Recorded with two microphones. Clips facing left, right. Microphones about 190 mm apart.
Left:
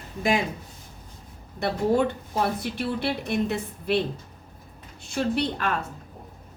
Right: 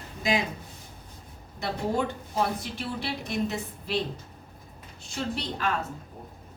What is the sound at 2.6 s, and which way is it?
A woman's voice, 60° left (ahead or behind).